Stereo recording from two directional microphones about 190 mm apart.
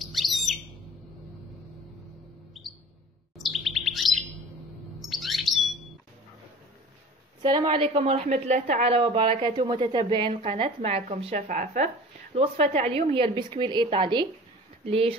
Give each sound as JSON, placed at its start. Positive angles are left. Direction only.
{"t": 0.0, "sound": "bird", "side_deg": 0}
{"t": 3.3, "sound": "chirp", "side_deg": 0}
{"t": 5.1, "sound": "bird", "side_deg": 0}
{"t": 7.4, "sound": "speech", "side_deg": -25}